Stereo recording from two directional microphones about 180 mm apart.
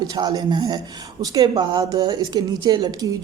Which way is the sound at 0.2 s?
20° right (ahead or behind).